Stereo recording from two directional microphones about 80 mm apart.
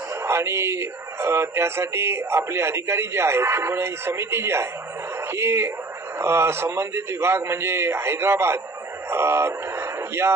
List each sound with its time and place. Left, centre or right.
0.1 s speech: right